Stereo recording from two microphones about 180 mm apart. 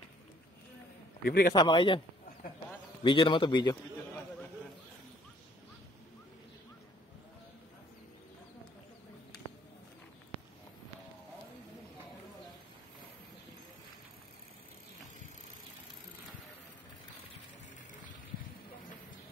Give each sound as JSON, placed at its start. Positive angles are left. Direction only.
{"t": 1.2, "sound": "a man's voice", "side_deg": 60}
{"t": 1.5, "sound": "a man's voice", "side_deg": 25}
{"t": 3.0, "sound": "a man's voice", "side_deg": 25}